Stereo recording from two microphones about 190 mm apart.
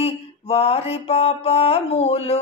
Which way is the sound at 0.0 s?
30° left (ahead or behind).